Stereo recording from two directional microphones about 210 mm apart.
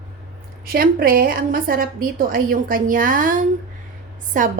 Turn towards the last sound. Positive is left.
turn(degrees=-40)  # may be behind; listen again after turning